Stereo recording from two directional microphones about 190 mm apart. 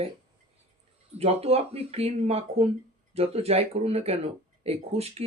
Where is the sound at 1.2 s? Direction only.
30° right (ahead or behind).